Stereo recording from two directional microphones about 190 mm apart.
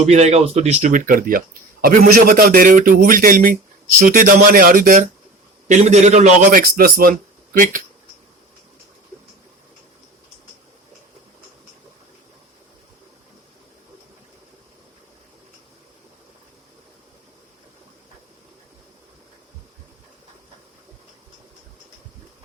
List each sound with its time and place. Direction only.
0.0 s a man's voice: 35° right (ahead or behind)